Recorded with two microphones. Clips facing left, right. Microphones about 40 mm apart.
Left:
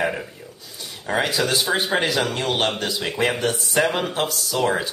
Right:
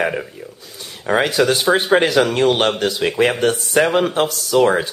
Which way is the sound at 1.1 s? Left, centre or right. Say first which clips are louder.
Right 5 dB; right.